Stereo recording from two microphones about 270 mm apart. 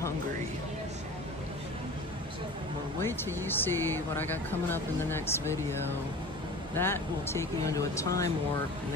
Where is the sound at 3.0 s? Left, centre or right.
Centre.